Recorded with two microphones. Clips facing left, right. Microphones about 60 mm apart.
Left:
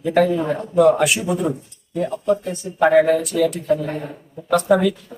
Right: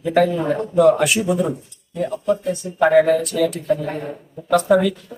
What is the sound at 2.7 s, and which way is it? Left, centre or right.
Speech, centre.